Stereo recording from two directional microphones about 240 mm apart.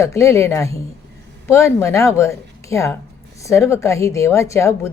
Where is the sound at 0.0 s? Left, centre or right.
Centre.